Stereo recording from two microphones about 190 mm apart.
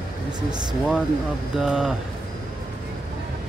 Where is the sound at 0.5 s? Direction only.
20° right (ahead or behind).